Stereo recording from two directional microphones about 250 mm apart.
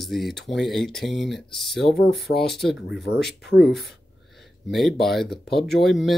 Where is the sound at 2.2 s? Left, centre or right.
Left.